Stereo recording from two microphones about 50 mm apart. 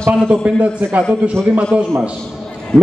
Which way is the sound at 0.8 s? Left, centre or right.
Right.